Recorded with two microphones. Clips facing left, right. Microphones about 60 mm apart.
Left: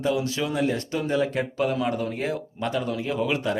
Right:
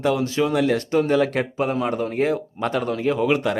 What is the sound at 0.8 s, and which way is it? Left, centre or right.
Speech, right.